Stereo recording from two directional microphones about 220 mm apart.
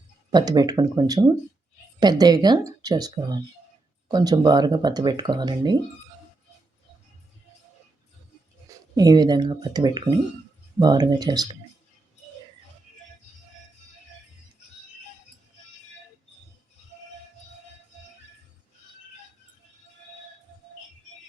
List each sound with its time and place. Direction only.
0.3 s speech: 20° right (ahead or behind)
9.0 s speech: 20° right (ahead or behind)